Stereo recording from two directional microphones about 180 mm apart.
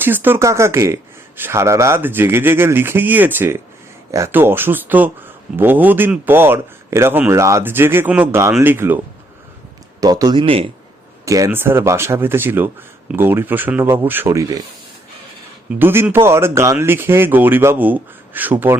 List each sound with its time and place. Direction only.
0.0 s speech: 10° right (ahead or behind)
10.0 s speech: 20° right (ahead or behind)
11.3 s speech: 15° right (ahead or behind)
15.7 s speech: 10° right (ahead or behind)